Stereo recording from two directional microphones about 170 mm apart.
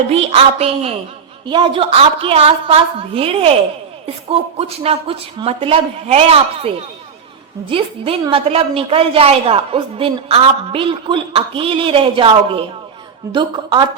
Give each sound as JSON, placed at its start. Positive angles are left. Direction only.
{"t": 0.1, "sound": "a woman's voice", "side_deg": -35}